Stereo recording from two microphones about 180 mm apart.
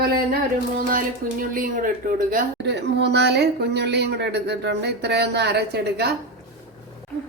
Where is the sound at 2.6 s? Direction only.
70° right (ahead or behind).